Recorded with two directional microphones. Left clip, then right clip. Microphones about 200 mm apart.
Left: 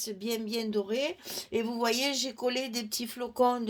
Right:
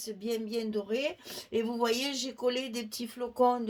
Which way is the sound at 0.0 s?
40° left (ahead or behind).